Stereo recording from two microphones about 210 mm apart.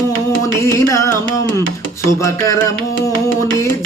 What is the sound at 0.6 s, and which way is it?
Music, 15° left (ahead or behind).